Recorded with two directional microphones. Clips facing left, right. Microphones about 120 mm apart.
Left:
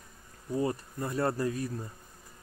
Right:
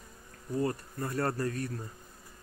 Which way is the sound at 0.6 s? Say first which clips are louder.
Left 1 dB; 15° left (ahead or behind).